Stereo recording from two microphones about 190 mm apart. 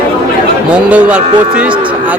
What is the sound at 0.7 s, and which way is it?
A man's voice, 5° right (ahead or behind).